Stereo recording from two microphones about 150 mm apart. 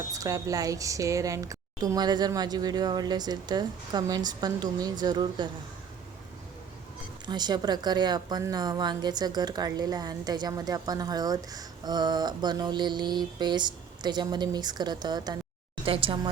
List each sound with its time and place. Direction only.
0.1 s a woman's voice: 20° right (ahead or behind)
7.3 s a woman's voice: 30° right (ahead or behind)